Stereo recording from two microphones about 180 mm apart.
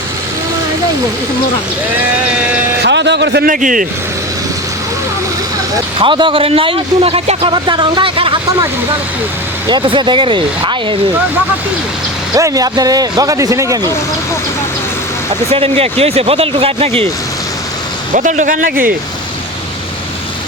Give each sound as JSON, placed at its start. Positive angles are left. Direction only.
{"t": 2.0, "sound": "sheep", "side_deg": -5}
{"t": 2.8, "sound": "a sound", "side_deg": -75}
{"t": 3.5, "sound": "speech", "side_deg": -50}
{"t": 6.0, "sound": "a man's voice", "side_deg": -25}
{"t": 9.6, "sound": "a man's voice", "side_deg": -25}
{"t": 12.3, "sound": "a man's voice", "side_deg": -20}
{"t": 15.5, "sound": "speech", "side_deg": -35}
{"t": 18.1, "sound": "speech", "side_deg": -45}